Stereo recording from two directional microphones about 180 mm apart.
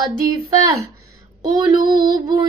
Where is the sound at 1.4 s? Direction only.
25° right (ahead or behind).